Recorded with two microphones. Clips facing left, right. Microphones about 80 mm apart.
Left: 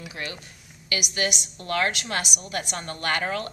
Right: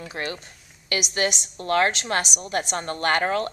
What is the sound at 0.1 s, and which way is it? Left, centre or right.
A woman's voice, right.